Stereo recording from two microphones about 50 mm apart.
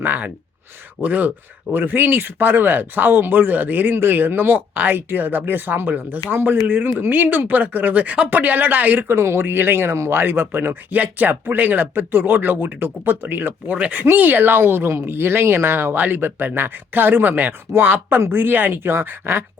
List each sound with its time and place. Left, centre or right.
0.0 s speech: right